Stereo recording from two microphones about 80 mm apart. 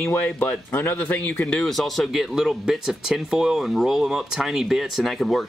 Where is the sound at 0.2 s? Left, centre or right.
Centre.